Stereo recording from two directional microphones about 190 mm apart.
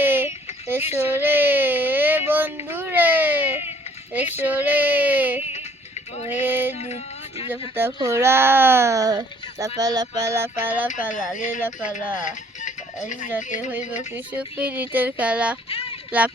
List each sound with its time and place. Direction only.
0.0 s a sound: 10° right (ahead or behind)
6.2 s music: 10° right (ahead or behind)
6.7 s music: 35° left (ahead or behind)
7.9 s speech: 15° right (ahead or behind)
11.1 s speech: 40° left (ahead or behind)
12.2 s music: 40° left (ahead or behind)
14.3 s speech: 5° right (ahead or behind)